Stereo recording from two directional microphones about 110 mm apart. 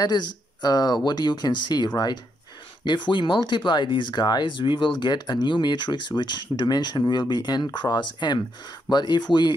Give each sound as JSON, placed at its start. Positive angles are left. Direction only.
{"t": 0.0, "sound": "speech", "side_deg": 40}